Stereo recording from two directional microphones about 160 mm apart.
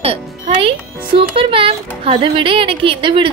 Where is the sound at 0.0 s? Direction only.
35° right (ahead or behind).